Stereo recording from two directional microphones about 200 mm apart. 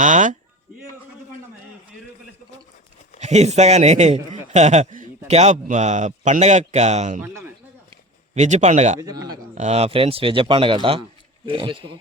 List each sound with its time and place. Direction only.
0.0 s speech: 40° right (ahead or behind)
3.2 s a man's voice: 35° right (ahead or behind)
7.2 s speech: 10° right (ahead or behind)
8.4 s a man's voice: 35° right (ahead or behind)
9.0 s speech: 15° right (ahead or behind)
9.6 s a man's voice: 35° right (ahead or behind)